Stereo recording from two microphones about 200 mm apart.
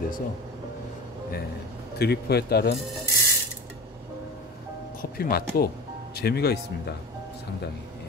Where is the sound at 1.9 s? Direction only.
55° left (ahead or behind).